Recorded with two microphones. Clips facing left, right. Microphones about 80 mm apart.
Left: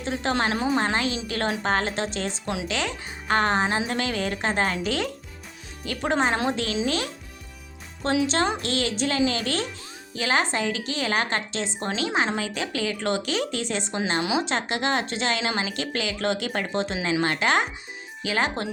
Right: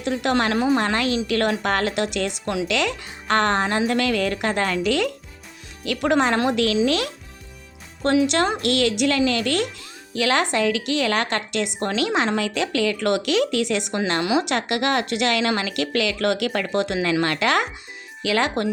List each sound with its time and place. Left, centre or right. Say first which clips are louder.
0.0 s a woman's voice: right 4 dB; right
0.8 s a woman's voice: right 3 dB; right
2.6 s speech: right 6 dB; right
3.3 s a woman's voice: right 2 dB; right
5.8 s a woman's voice: right 4 dB; right
8.0 s a woman's voice: right 4 dB; right
10.2 s a woman's voice: right 4 dB; right
11.9 s a woman's voice: right 4 dB; right
14.1 s a woman's voice: right 4 dB; right
14.4 s a woman's voice: right 3 dB; right